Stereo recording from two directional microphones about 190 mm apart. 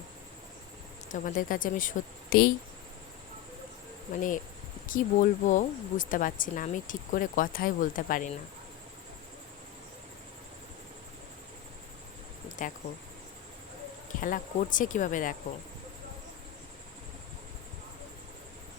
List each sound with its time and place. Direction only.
1.0 s speech: 45° left (ahead or behind)
4.9 s speech: 45° left (ahead or behind)
12.5 s a sound: 45° left (ahead or behind)
14.2 s speech: 45° left (ahead or behind)